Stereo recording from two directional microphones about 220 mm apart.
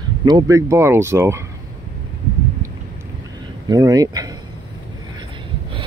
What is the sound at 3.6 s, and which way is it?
Speech, 15° right (ahead or behind).